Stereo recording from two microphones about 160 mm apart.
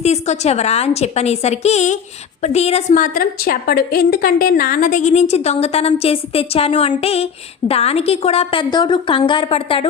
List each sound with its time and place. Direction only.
0.0 s a woman's voice: 40° left (ahead or behind)
3.0 s a woman's voice: 65° left (ahead or behind); by 9.8 s 35° left (ahead or behind)